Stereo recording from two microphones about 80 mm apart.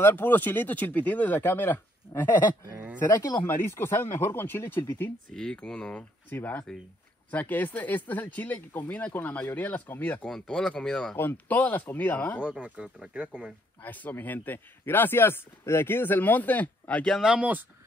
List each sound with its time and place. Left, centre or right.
0.0 s speech: left
5.3 s speech: centre
6.3 s speech: left
10.2 s speech: centre
11.1 s speech: left
12.4 s speech: centre
13.8 s speech: left
17.2 s speech: centre